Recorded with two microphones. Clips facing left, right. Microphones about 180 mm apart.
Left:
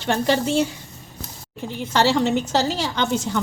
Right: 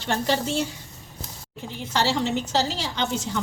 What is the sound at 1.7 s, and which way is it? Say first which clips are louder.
A woman's voice: left 5 dB; 60° left (ahead or behind).